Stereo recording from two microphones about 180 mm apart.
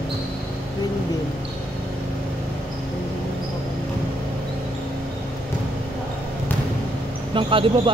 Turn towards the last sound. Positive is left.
turn(degrees=-30)  # may be behind; listen again after turning